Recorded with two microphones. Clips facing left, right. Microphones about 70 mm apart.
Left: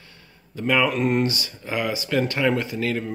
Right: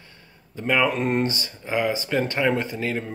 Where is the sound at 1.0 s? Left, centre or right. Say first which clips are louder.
Left 2 dB; right.